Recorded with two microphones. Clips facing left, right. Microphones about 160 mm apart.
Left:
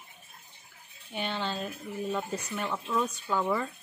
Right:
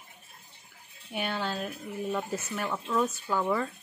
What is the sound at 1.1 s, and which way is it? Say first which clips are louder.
Speech: right 1 dB; 5° right (ahead or behind).